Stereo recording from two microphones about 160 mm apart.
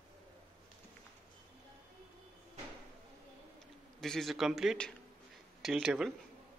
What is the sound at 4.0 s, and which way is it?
Speech, centre (ahead or behind).